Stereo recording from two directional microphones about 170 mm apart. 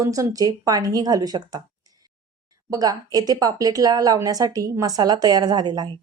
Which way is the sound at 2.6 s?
20° right (ahead or behind).